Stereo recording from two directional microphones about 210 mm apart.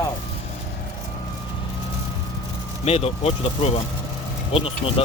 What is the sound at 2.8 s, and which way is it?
Speech, 30° left (ahead or behind).